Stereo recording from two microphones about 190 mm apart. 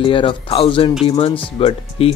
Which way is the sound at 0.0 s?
25° left (ahead or behind).